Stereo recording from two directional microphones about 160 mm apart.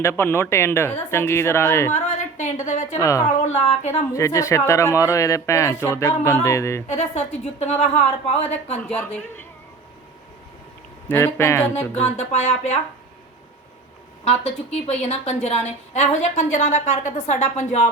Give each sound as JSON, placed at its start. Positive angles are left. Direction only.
{"t": 0.0, "sound": "speech", "side_deg": 15}
{"t": 1.9, "sound": "a woman's voice", "side_deg": 45}
{"t": 3.0, "sound": "a woman's voice", "side_deg": 20}
{"t": 3.4, "sound": "a woman's voice", "side_deg": 45}
{"t": 4.1, "sound": "speech", "side_deg": 20}
{"t": 6.8, "sound": "a woman's voice", "side_deg": 45}
{"t": 8.9, "sound": "speech", "side_deg": 10}
{"t": 11.1, "sound": "speech", "side_deg": 15}
{"t": 11.9, "sound": "a woman's voice", "side_deg": 45}
{"t": 14.3, "sound": "a woman's voice", "side_deg": 40}